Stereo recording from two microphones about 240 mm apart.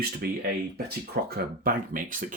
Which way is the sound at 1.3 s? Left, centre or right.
Right.